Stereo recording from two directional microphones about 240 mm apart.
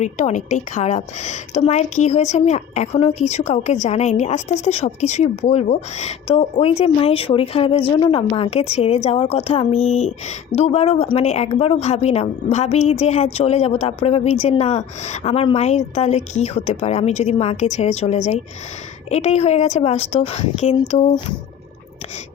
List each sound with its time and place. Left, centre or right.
0.0 s a woman's voice: left